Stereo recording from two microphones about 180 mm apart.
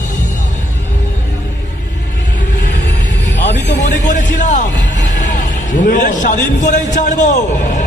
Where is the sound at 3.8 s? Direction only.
45° left (ahead or behind).